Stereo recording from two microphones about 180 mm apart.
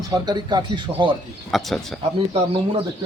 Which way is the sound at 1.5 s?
Centre (ahead or behind).